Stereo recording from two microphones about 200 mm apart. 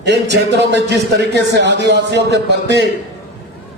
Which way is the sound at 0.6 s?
60° right (ahead or behind).